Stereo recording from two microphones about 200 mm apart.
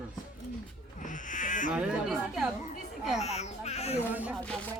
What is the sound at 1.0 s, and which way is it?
Speech, 40° left (ahead or behind).